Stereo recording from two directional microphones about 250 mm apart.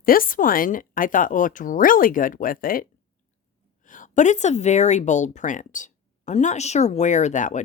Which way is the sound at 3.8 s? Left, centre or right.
Left.